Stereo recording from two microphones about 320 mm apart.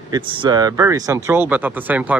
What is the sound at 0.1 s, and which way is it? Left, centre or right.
Speech, centre.